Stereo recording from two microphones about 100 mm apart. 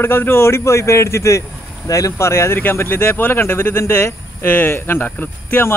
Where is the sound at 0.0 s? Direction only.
25° left (ahead or behind).